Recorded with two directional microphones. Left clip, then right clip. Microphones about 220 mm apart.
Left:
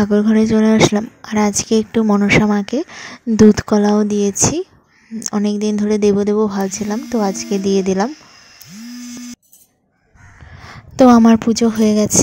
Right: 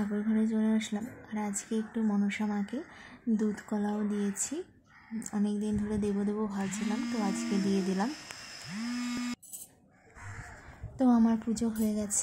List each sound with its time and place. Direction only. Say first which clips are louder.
0.0 s speech: left 18 dB; 40° left (ahead or behind)
11.0 s speech: left 18 dB; 40° left (ahead or behind)